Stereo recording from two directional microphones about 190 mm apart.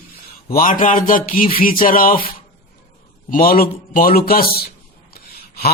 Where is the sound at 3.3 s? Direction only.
50° left (ahead or behind).